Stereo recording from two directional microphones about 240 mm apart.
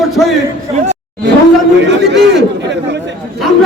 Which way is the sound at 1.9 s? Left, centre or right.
Right.